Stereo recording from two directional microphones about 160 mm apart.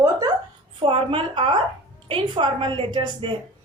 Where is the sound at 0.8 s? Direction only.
35° right (ahead or behind).